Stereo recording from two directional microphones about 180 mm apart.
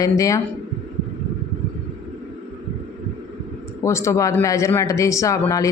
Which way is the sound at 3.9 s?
15° left (ahead or behind).